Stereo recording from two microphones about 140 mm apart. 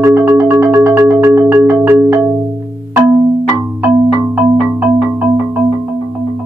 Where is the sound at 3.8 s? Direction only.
15° right (ahead or behind).